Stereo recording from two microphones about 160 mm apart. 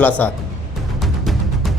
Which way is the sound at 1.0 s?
Centre (ahead or behind).